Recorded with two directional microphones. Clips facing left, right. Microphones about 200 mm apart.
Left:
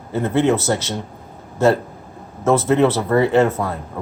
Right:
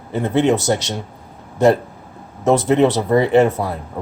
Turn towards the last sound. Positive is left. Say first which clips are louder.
# right 2 dB
turn(degrees=-15)  # may be behind; listen again after turning